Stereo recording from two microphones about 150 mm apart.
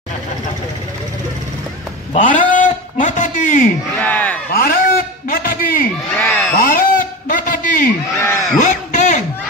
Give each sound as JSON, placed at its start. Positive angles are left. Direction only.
{"t": 2.1, "sound": "a man's voice", "side_deg": 60}
{"t": 4.0, "sound": "speech", "side_deg": 10}
{"t": 4.6, "sound": "a man's voice", "side_deg": 75}
{"t": 6.1, "sound": "speech", "side_deg": 10}
{"t": 6.6, "sound": "a sound", "side_deg": 70}
{"t": 8.2, "sound": "speech", "side_deg": 20}
{"t": 8.5, "sound": "a sound", "side_deg": 55}